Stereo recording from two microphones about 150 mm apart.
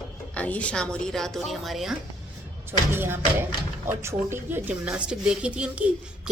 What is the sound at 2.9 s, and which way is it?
A woman's voice, 15° right (ahead or behind).